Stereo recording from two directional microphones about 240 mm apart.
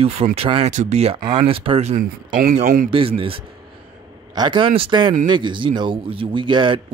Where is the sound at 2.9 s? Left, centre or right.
Right.